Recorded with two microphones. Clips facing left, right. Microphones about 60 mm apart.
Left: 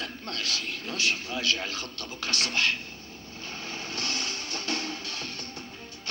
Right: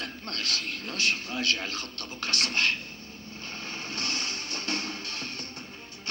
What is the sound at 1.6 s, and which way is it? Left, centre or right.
Vehicle, right.